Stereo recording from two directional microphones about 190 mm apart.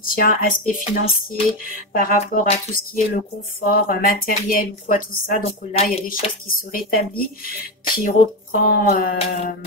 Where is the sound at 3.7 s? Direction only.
50° left (ahead or behind).